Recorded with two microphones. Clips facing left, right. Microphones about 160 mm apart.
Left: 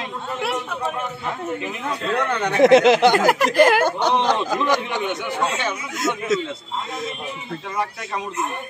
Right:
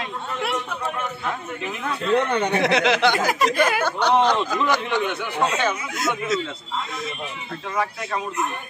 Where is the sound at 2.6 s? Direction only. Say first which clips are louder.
Left 10 dB; 45° left (ahead or behind); by 3.8 s 70° left (ahead or behind).